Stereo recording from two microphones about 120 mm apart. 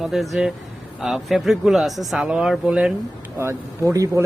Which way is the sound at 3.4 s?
20° right (ahead or behind).